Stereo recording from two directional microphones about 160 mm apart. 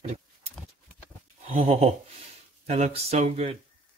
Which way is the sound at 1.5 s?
35° right (ahead or behind).